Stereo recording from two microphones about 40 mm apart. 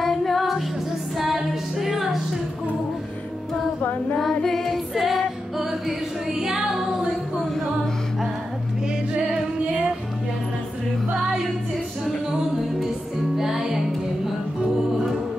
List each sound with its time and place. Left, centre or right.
0.0 s music: centre
4.2 s music: centre
4.9 s music: centre
6.4 s female singing: centre
9.1 s music: right
11.2 s music: centre
13.4 s music: centre